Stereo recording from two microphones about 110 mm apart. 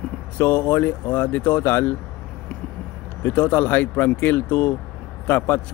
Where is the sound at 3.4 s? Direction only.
15° left (ahead or behind).